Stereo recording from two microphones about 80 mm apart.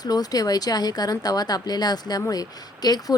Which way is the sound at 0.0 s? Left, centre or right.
Left.